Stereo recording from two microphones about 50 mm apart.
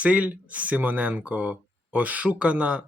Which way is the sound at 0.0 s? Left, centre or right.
Right.